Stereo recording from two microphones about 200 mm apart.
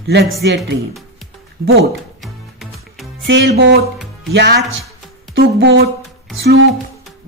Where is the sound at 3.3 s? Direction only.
60° right (ahead or behind).